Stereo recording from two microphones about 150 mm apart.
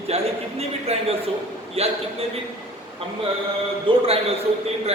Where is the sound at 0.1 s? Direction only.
45° right (ahead or behind).